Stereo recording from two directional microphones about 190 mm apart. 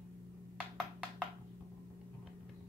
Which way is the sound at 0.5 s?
5° right (ahead or behind).